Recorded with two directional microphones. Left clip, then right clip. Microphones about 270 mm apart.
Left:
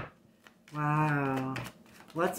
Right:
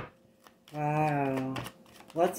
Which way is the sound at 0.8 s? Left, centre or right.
Centre.